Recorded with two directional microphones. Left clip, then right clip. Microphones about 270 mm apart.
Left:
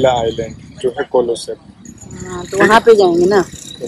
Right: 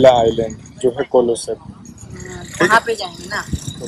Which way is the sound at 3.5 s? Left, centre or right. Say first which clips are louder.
Right 3 dB; right.